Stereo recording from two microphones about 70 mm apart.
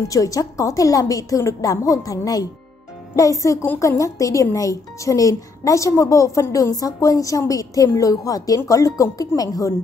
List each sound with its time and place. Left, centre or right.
0.1 s a woman's voice: left